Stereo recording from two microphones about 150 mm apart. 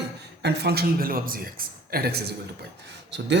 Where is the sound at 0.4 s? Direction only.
90° right.